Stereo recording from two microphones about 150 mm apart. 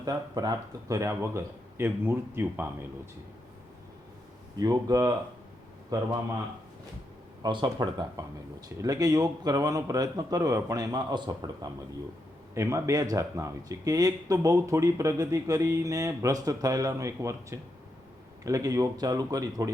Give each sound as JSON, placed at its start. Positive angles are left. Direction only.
{"t": 0.0, "sound": "speech", "side_deg": -25}
{"t": 4.5, "sound": "speech", "side_deg": -25}
{"t": 7.4, "sound": "speech", "side_deg": -30}